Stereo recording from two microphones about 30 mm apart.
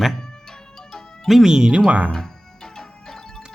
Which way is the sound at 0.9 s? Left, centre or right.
Centre.